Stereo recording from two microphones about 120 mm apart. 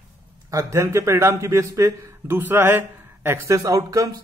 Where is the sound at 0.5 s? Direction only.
25° right (ahead or behind).